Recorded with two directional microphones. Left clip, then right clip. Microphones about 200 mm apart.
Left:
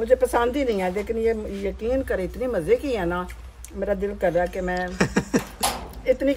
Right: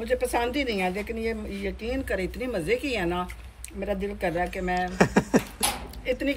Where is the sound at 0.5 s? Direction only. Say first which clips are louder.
Left 4 dB; 20° left (ahead or behind).